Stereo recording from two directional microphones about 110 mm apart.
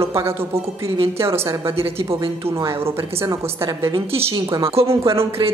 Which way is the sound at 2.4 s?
25° right (ahead or behind).